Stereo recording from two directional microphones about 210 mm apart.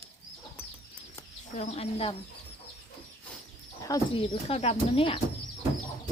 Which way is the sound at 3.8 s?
20° left (ahead or behind).